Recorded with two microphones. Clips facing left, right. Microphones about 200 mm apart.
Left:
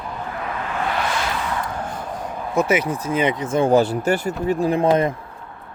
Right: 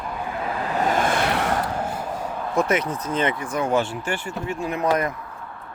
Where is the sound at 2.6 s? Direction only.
5° left (ahead or behind); by 5.1 s 25° left (ahead or behind).